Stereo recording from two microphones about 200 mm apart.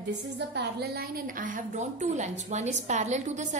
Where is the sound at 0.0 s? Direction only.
60° right (ahead or behind).